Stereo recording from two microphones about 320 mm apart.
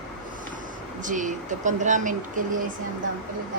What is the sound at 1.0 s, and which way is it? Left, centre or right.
Speech, right.